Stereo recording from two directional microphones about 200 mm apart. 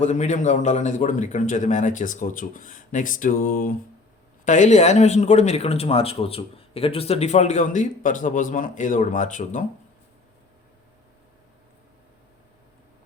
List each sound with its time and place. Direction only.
0.0 s speech: 35° left (ahead or behind)